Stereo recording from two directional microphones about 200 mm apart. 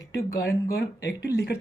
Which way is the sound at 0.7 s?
55° left (ahead or behind).